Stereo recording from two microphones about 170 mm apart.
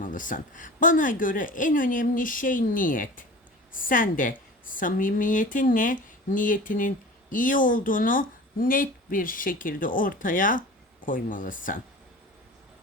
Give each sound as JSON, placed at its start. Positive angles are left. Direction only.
{"t": 0.0, "sound": "a woman's voice", "side_deg": 50}